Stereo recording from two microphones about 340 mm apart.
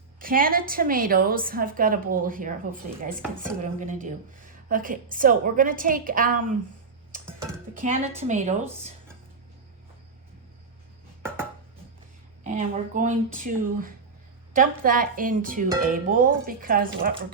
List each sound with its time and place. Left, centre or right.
0.2 s a woman's voice: right
7.7 s a woman's voice: right
12.4 s a woman's voice: right